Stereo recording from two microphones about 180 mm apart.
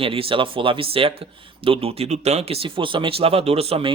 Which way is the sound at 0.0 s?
30° right (ahead or behind).